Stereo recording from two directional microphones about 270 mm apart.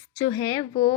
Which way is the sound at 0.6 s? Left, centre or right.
Left.